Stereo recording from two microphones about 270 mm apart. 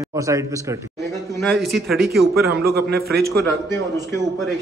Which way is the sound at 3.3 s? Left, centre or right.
Centre.